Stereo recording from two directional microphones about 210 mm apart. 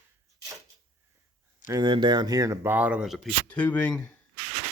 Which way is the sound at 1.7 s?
20° right (ahead or behind).